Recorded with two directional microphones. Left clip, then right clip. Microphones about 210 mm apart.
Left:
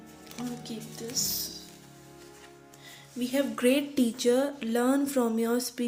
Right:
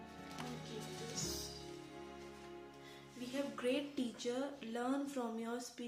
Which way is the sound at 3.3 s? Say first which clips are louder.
Left 13 dB; 45° left (ahead or behind).